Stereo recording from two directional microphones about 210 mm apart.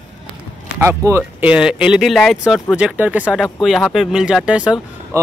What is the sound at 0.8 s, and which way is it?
Speech, 10° right (ahead or behind).